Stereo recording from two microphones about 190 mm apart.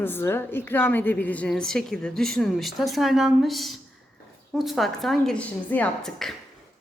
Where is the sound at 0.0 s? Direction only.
10° left (ahead or behind).